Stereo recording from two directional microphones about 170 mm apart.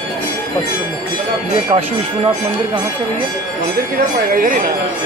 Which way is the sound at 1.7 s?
35° right (ahead or behind).